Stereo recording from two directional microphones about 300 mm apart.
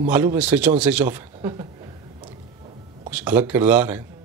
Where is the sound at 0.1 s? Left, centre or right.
Centre.